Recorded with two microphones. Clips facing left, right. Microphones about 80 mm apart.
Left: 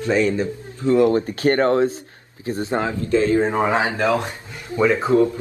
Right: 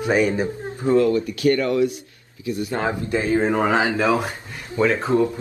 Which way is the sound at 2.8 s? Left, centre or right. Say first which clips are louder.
Left 4 dB; right.